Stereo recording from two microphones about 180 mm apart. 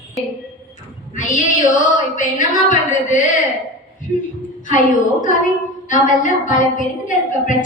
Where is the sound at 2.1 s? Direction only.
45° left (ahead or behind).